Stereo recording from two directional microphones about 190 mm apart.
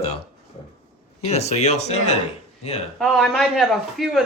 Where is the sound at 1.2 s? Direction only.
35° left (ahead or behind).